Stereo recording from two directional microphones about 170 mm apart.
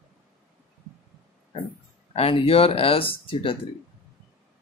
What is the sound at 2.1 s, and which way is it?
Speech, 35° left (ahead or behind).